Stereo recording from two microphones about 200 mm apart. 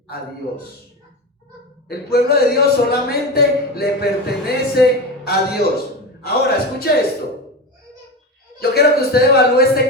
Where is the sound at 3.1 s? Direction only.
50° left (ahead or behind).